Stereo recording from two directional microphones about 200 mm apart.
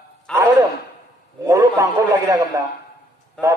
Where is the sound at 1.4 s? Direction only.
15° right (ahead or behind).